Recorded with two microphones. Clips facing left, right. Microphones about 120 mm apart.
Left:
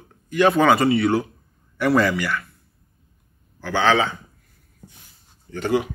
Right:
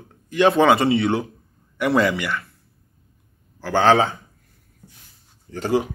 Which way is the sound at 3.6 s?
40° right (ahead or behind).